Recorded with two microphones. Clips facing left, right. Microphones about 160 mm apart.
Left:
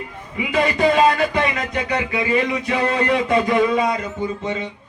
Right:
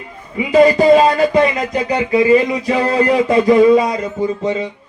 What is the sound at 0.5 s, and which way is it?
A man's voice, 35° right (ahead or behind).